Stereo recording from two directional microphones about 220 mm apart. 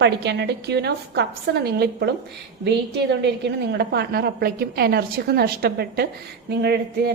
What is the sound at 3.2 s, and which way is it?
A woman's voice, 50° right (ahead or behind).